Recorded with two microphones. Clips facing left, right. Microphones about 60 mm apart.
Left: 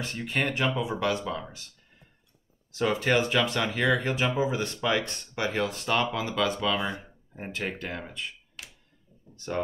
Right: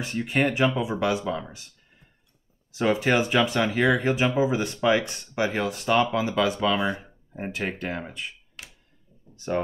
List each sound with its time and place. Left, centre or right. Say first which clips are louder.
0.0 s speech: right 5 dB; centre
2.7 s speech: right 3 dB; centre
9.3 s a sound: right 6 dB; centre